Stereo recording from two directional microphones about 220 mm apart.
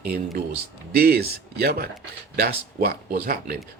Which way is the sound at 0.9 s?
45° right (ahead or behind).